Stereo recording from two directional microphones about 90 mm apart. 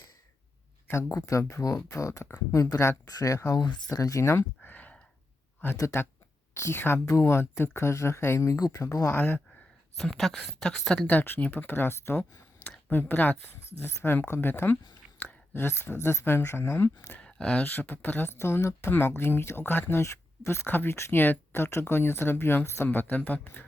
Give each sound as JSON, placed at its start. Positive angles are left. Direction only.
{"t": 0.9, "sound": "speech", "side_deg": 25}
{"t": 1.1, "sound": "speech", "side_deg": 35}
{"t": 5.7, "sound": "speech", "side_deg": 30}
{"t": 9.0, "sound": "speech", "side_deg": 20}
{"t": 10.0, "sound": "speech", "side_deg": 5}
{"t": 15.2, "sound": "a sound", "side_deg": 20}
{"t": 16.0, "sound": "speech", "side_deg": 25}
{"t": 17.2, "sound": "a sound", "side_deg": 10}
{"t": 17.7, "sound": "speech", "side_deg": 20}